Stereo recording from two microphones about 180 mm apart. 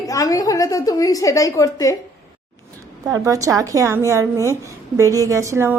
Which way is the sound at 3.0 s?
20° right (ahead or behind).